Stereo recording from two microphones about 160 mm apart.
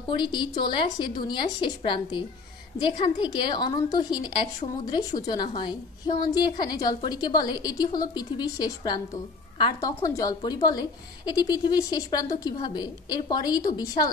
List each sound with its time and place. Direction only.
0.1 s a woman's voice: 30° left (ahead or behind)